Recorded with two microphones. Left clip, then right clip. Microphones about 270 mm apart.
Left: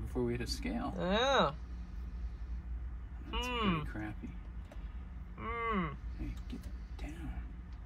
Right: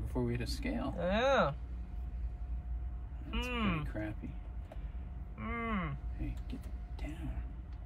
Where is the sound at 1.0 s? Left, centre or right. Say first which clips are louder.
Even; centre.